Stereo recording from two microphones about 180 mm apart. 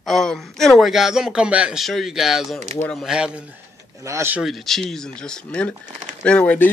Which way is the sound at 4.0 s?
15° right (ahead or behind).